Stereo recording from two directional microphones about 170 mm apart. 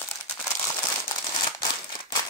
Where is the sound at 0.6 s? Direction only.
20° left (ahead or behind).